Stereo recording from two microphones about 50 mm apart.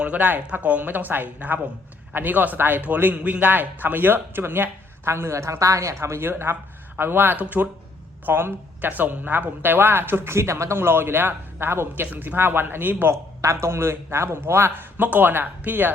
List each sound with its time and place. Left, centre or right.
0.0 s speech: right
5.3 s speech: right
7.3 s speech: right
8.3 s speech: right
13.1 s a man's voice: right
14.9 s speech: right